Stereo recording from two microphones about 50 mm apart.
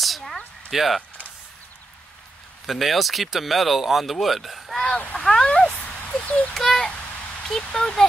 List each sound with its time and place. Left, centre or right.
0.0 s a sound: centre
0.7 s speech: centre
2.6 s speech: centre
4.8 s speech: centre
6.2 s a child's voice: left
6.5 s speech: centre